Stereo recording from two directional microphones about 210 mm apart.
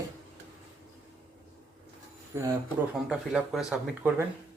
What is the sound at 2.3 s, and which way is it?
Speech, 10° right (ahead or behind).